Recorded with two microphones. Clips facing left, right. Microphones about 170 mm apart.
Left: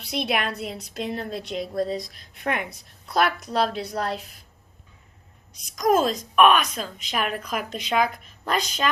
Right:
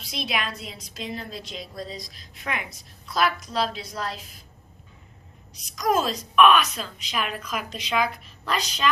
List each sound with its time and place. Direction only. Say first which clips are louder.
0.0 s a woman's voice: left 4 dB; 60° left (ahead or behind)
5.7 s a woman's voice: left 3 dB; 50° left (ahead or behind)